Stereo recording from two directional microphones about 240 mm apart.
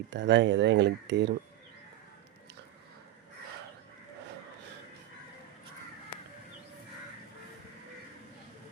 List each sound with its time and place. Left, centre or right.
0.1 s speech: right